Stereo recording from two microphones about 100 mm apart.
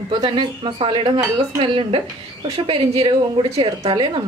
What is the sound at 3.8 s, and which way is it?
Speech, 45° right (ahead or behind).